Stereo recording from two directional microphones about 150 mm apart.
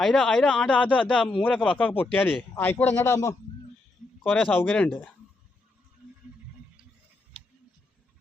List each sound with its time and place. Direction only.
0.0 s speech: 5° left (ahead or behind); by 3.3 s 20° left (ahead or behind)
4.2 s speech: 5° left (ahead or behind)